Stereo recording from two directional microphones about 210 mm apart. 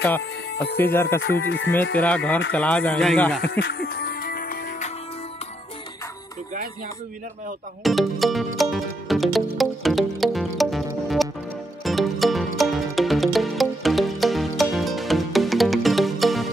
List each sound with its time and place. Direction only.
0.2 s speech: 55° left (ahead or behind)
0.7 s speech: 10° left (ahead or behind)
1.4 s speech: 60° left (ahead or behind)
1.7 s speech: 10° left (ahead or behind)
3.4 s music: 45° left (ahead or behind)
7.8 s music: centre (ahead or behind)